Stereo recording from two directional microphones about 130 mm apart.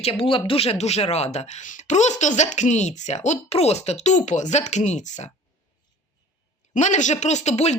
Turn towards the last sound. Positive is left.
turn(degrees=60)  # may be behind; listen again after turning